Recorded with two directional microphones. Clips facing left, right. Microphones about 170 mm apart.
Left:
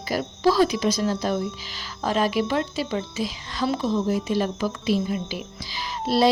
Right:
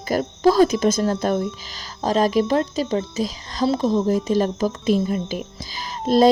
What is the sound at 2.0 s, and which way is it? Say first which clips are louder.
A woman's voice: right 4 dB; 40° right (ahead or behind).